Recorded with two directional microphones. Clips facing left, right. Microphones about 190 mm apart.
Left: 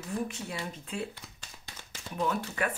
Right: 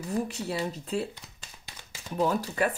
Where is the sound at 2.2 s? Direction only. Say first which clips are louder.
Right 5 dB; 35° right (ahead or behind).